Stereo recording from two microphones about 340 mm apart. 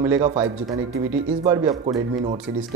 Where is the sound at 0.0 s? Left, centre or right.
Centre.